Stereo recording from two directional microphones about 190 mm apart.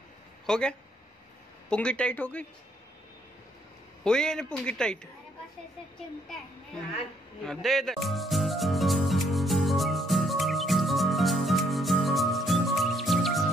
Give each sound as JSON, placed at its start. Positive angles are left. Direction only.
{"t": 0.5, "sound": "a man's voice", "side_deg": 5}
{"t": 4.0, "sound": "a man's voice", "side_deg": 5}
{"t": 7.4, "sound": "music", "side_deg": 0}